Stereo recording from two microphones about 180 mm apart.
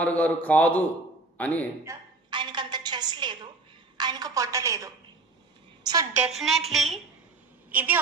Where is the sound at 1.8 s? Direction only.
20° right (ahead or behind).